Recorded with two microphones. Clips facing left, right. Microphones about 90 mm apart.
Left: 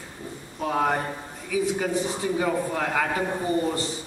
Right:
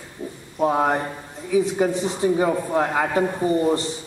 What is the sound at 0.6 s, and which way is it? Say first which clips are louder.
Speech: right 5 dB; 20° right (ahead or behind).